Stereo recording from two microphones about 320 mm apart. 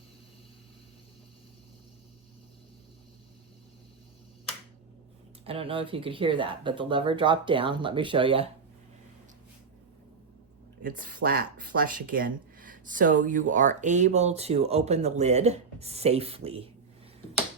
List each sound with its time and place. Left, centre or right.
5.5 s speech: centre
10.8 s speech: right